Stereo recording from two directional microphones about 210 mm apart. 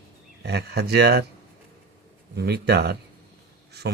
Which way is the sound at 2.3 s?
50° right (ahead or behind).